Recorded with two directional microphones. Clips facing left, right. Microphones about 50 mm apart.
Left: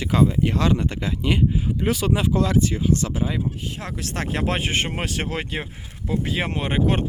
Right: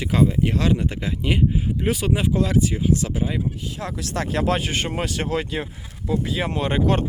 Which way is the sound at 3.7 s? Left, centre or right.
Left.